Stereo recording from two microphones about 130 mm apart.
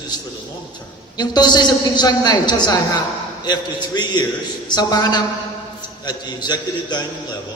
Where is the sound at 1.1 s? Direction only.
30° left (ahead or behind).